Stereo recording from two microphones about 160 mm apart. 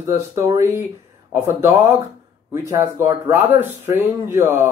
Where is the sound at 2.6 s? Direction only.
15° right (ahead or behind).